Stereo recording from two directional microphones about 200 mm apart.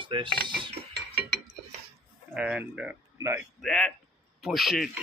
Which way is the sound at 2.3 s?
5° right (ahead or behind).